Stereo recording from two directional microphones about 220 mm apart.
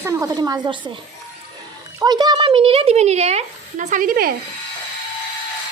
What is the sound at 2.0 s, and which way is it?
A woman's voice, 20° right (ahead or behind).